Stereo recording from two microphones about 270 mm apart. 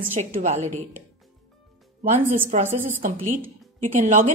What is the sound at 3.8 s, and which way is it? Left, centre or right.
Speech, right.